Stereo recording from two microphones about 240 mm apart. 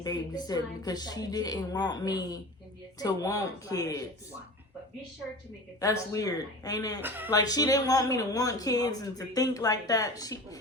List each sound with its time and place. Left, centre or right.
0.0 s speech: centre
5.8 s speech: centre